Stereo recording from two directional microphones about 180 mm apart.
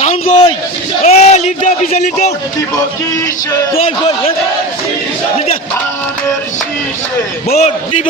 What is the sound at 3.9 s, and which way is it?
Speech, 30° left (ahead or behind).